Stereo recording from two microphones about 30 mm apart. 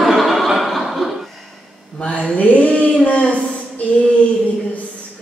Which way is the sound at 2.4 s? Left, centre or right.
Left.